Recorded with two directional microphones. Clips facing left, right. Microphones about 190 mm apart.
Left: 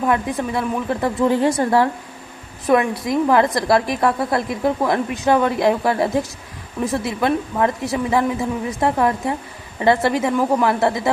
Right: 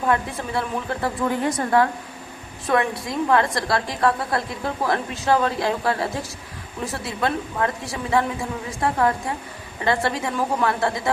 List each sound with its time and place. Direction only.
0.1 s a woman's voice: 15° left (ahead or behind)
2.6 s a woman's voice: 20° left (ahead or behind)